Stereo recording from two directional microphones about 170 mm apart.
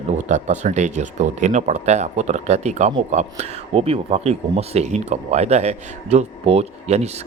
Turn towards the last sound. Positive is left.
turn(degrees=-40)  # may be behind; listen again after turning